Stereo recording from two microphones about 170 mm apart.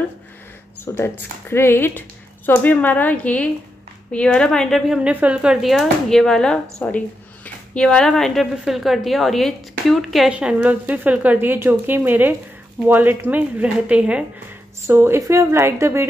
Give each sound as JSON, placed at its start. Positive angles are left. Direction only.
{"t": 0.9, "sound": "speech", "side_deg": 15}